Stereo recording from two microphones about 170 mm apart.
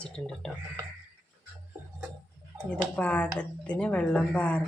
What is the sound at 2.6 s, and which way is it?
Speech, 5° left (ahead or behind).